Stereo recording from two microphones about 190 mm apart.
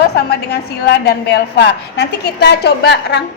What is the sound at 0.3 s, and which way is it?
A woman's voice, 60° left (ahead or behind).